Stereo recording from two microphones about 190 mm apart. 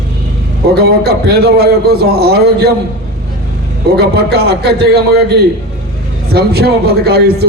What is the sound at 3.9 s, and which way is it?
Speech, 55° right (ahead or behind).